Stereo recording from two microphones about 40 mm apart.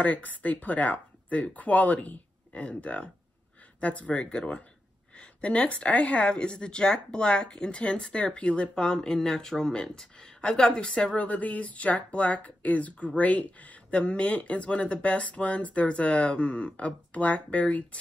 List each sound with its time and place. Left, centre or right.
0.0 s a woman's voice: left; by 11.1 s centre
11.1 s speech: left